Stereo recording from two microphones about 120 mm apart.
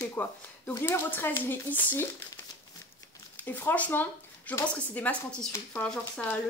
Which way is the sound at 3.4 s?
15° left (ahead or behind).